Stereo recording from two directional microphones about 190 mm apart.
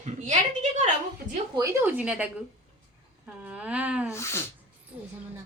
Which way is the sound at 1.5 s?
15° right (ahead or behind).